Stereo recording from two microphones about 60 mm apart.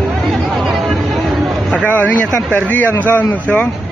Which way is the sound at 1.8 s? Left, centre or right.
Left.